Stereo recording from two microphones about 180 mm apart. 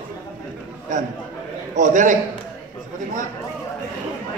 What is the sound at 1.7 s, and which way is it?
Speech, 45° right (ahead or behind).